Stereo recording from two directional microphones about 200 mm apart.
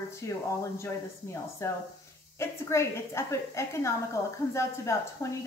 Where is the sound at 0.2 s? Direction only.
15° left (ahead or behind).